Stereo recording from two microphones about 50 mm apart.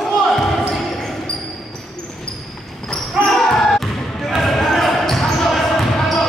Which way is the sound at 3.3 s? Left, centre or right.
Centre.